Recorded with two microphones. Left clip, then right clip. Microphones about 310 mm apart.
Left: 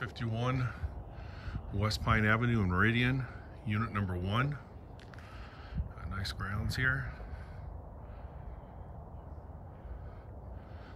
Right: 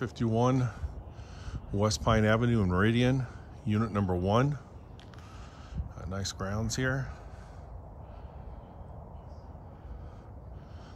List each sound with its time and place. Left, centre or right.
0.0 s speech: centre
5.9 s speech: centre